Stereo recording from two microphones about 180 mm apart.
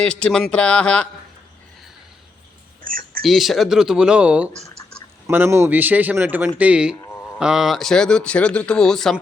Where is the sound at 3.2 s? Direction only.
Centre (ahead or behind).